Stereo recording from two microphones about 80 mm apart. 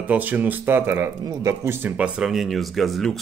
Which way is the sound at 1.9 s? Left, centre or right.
Centre.